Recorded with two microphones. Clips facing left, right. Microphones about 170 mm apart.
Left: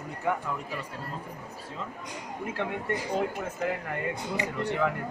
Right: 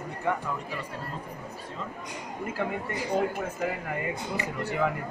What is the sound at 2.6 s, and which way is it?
Speech, 5° right (ahead or behind).